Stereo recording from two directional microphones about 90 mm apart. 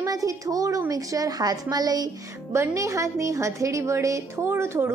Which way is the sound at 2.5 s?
35° right (ahead or behind).